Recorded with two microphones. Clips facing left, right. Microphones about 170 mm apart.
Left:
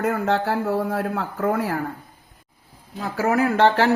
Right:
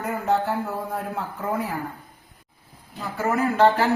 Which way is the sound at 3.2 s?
85° left.